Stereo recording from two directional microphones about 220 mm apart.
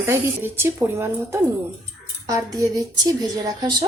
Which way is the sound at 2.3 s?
15° right (ahead or behind).